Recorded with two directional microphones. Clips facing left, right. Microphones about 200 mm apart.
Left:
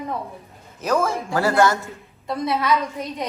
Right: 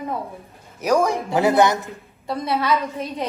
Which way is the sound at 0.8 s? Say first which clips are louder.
Right 3 dB; 15° right (ahead or behind).